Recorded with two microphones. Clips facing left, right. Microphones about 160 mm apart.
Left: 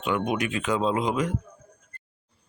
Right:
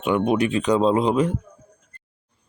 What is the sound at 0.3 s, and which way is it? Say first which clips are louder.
Speech: right 7 dB; 30° right (ahead or behind).